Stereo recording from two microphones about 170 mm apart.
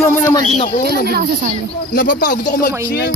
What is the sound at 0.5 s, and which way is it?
Speech, 45° left (ahead or behind).